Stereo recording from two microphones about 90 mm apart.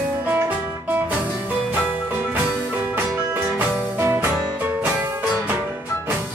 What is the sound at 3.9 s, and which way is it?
Music, 30° right (ahead or behind).